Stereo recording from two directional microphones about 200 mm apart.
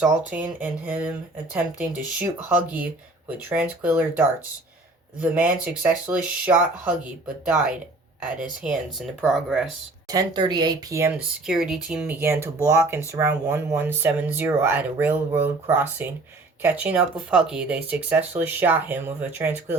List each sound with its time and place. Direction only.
0.0 s speech: 5° right (ahead or behind)
5.2 s speech: 5° right (ahead or behind)
10.1 s speech: 20° right (ahead or behind)
11.4 s speech: centre (ahead or behind)